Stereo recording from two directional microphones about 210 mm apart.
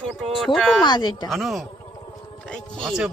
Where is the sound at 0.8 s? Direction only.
20° left (ahead or behind).